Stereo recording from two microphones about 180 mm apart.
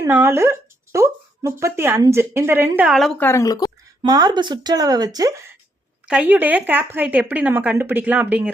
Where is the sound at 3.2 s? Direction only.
15° left (ahead or behind).